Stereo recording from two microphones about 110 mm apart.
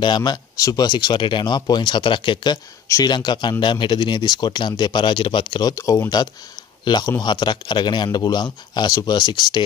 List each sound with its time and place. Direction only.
0.0 s speech: 40° left (ahead or behind)